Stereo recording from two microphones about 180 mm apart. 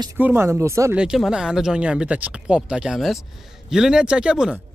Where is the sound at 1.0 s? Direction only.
5° right (ahead or behind).